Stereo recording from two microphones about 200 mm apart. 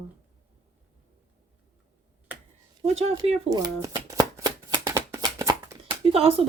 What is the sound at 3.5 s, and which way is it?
Shuffling cards, 20° right (ahead or behind).